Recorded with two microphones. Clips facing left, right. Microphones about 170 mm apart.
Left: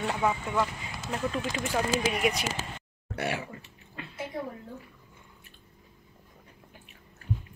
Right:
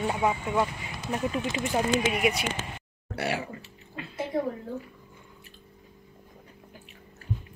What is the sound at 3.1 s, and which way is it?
Speech, 35° right (ahead or behind).